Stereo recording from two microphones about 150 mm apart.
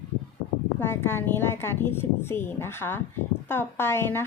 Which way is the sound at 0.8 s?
15° left (ahead or behind).